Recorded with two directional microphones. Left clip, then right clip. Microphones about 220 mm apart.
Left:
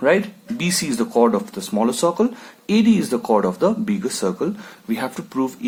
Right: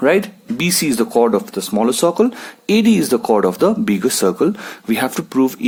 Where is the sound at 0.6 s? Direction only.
35° right (ahead or behind).